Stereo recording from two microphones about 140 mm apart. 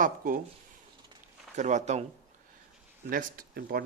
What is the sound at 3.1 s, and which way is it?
Speech, 90° right.